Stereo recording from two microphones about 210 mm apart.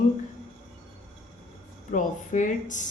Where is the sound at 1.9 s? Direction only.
35° left (ahead or behind).